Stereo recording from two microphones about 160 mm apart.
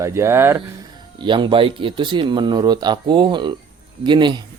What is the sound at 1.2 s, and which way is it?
Speech, 30° right (ahead or behind).